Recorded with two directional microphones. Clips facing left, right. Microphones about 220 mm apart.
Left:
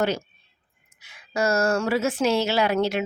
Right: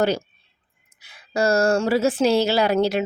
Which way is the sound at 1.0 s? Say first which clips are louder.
Right 3 dB; 35° right (ahead or behind).